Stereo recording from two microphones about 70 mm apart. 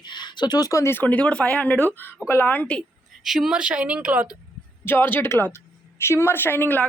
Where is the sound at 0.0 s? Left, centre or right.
Left.